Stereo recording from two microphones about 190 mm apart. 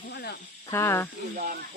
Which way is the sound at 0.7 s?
15° left (ahead or behind).